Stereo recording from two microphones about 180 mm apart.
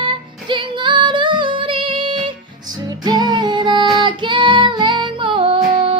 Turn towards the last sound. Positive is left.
turn(degrees=-30)  # may be behind; listen again after turning